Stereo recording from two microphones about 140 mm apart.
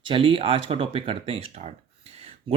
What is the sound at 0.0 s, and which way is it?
Speech, 40° right (ahead or behind).